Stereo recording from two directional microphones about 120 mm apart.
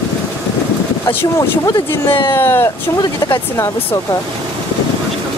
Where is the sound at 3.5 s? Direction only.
25° left (ahead or behind).